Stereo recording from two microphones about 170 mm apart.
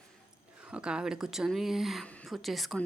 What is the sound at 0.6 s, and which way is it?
A woman's voice, 5° right (ahead or behind).